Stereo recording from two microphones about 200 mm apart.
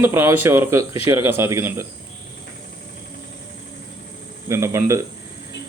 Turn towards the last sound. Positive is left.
turn(degrees=-15)  # may be behind; listen again after turning